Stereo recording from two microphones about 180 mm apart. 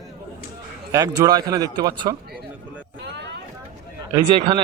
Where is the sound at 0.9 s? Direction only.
20° right (ahead or behind).